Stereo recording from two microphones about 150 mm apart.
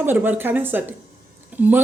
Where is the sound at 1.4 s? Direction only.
10° right (ahead or behind).